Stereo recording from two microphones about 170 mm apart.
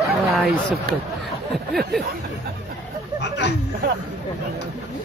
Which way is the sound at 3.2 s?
80° left.